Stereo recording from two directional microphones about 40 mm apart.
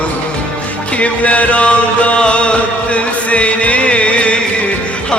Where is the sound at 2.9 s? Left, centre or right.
Left.